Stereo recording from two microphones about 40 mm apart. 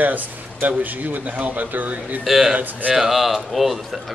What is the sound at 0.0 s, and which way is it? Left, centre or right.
Speech, right.